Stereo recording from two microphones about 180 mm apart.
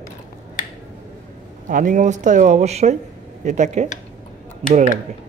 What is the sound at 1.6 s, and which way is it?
Speech, 45° right (ahead or behind).